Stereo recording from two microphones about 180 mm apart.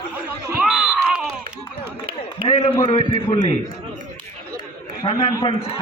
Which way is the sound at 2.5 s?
35° left (ahead or behind).